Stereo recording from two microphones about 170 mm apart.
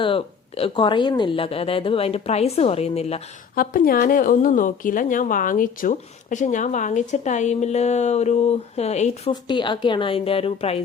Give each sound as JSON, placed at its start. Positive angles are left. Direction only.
{"t": 0.0, "sound": "speech", "side_deg": 30}
{"t": 3.5, "sound": "speech", "side_deg": 55}
{"t": 9.3, "sound": "speech", "side_deg": 25}